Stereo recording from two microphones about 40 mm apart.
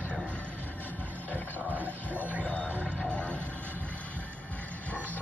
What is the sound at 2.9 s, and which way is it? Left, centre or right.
Music, left.